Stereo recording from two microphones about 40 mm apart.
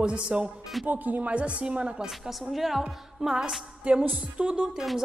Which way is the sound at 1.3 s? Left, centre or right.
Right.